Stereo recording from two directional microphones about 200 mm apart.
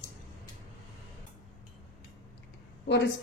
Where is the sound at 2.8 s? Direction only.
60° left (ahead or behind).